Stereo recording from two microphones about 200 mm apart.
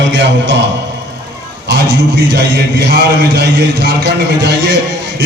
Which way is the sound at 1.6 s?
55° right (ahead or behind).